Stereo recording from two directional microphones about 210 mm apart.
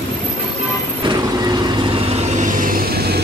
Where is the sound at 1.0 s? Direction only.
20° right (ahead or behind).